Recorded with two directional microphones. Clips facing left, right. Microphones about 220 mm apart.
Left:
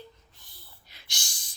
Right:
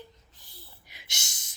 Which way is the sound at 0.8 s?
15° right (ahead or behind).